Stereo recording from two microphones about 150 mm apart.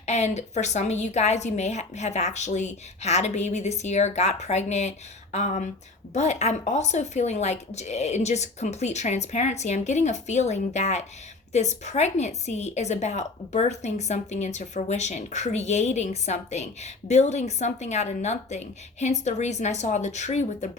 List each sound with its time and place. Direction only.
0.0 s a woman's voice: 50° left (ahead or behind)